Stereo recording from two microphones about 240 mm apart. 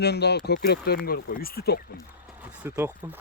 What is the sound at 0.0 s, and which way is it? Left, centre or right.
Speech, left.